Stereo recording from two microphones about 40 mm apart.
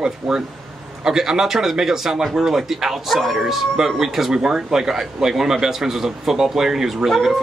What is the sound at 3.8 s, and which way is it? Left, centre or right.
A man's voice, centre.